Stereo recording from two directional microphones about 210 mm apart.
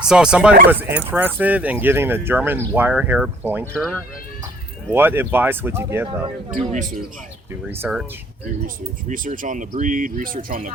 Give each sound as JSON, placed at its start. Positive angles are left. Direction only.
{"t": 0.1, "sound": "speech", "side_deg": -5}
{"t": 4.9, "sound": "speech", "side_deg": -10}
{"t": 6.2, "sound": "speech", "side_deg": -35}
{"t": 7.7, "sound": "speech", "side_deg": -5}
{"t": 8.6, "sound": "speech", "side_deg": -40}